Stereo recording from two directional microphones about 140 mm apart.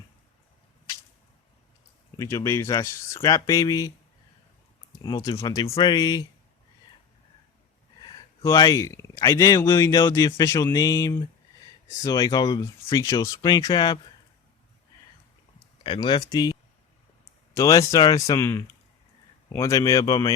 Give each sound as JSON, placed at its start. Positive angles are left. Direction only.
{"t": 2.1, "sound": "speech", "side_deg": 20}
{"t": 5.0, "sound": "speech", "side_deg": 25}
{"t": 5.6, "sound": "speech", "side_deg": 35}
{"t": 8.0, "sound": "a sound", "side_deg": 30}
{"t": 8.4, "sound": "speech", "side_deg": 25}
{"t": 15.8, "sound": "speech", "side_deg": 35}